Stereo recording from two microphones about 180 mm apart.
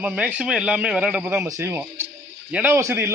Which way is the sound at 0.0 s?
10° right (ahead or behind).